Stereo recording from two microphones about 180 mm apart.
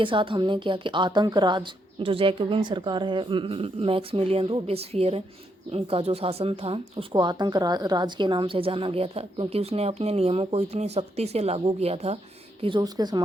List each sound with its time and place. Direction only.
0.0 s a woman's voice: 30° right (ahead or behind)